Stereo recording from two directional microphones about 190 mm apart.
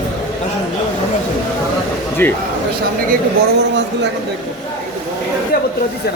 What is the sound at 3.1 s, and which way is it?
Speech, 60° right (ahead or behind).